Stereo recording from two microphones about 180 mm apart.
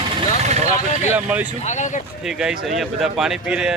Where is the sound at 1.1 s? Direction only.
10° right (ahead or behind).